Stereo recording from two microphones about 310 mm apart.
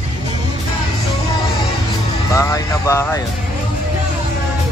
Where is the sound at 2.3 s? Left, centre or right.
Centre.